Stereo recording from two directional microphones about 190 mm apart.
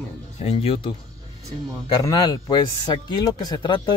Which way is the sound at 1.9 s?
20° left (ahead or behind).